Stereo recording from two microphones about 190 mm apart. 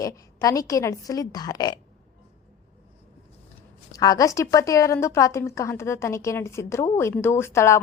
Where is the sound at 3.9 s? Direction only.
20° left (ahead or behind).